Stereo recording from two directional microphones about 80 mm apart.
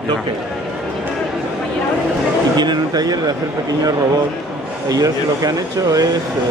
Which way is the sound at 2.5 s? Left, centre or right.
Right.